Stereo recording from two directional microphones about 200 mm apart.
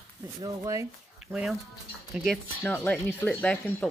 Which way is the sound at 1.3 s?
Centre (ahead or behind).